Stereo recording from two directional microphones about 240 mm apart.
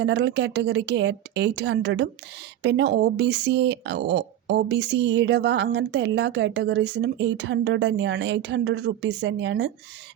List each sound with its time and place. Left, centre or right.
0.0 s speech: right